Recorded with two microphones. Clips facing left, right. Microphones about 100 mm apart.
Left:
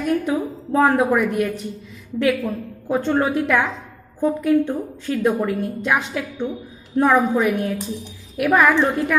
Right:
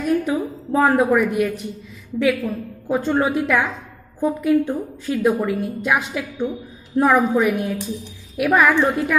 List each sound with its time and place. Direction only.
0.0 s a woman's voice: 5° right (ahead or behind)
2.9 s a woman's voice: 5° right (ahead or behind)